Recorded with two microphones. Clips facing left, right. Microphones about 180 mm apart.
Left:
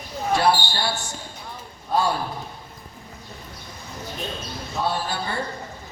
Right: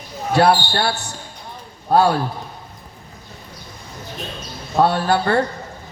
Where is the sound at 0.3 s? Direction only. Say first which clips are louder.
Right 6 dB; 65° right (ahead or behind).